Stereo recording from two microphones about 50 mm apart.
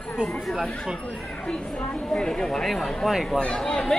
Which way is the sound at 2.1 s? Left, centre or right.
Centre.